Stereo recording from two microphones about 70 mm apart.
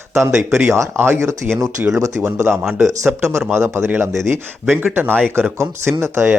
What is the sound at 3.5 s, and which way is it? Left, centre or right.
Speech, right.